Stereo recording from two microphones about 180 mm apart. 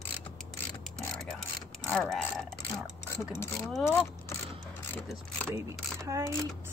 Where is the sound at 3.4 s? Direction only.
5° left (ahead or behind).